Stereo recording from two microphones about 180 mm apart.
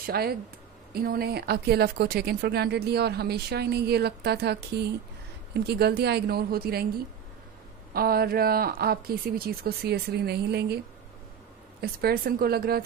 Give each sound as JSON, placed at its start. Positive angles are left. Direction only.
{"t": 0.0, "sound": "speech", "side_deg": -60}
{"t": 7.9, "sound": "speech", "side_deg": -55}
{"t": 11.8, "sound": "speech", "side_deg": -60}